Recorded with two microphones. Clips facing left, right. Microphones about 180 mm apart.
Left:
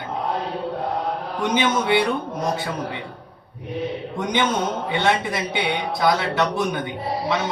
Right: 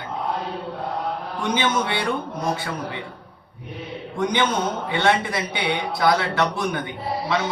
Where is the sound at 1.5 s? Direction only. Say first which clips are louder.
Left 4 dB; 20° left (ahead or behind).